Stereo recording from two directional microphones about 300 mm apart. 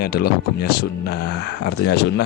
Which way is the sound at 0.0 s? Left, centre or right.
Left.